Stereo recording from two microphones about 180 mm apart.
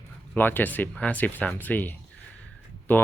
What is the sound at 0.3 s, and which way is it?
Speech, 10° left (ahead or behind).